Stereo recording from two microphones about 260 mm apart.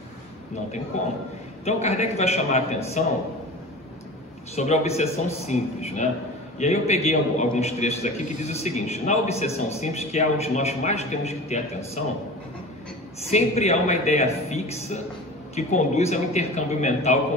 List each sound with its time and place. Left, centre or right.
0.9 s a man's voice: left
4.6 s a man's voice: left
13.3 s a man's voice: left